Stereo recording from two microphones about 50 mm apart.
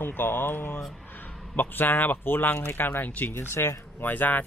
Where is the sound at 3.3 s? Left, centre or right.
Left.